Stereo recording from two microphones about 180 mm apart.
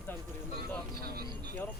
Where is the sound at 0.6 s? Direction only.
60° right (ahead or behind).